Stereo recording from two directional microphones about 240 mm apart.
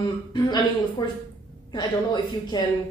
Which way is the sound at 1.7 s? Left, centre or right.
Centre.